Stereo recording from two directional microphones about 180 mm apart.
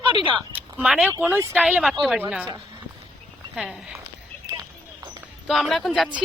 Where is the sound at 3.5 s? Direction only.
Centre (ahead or behind).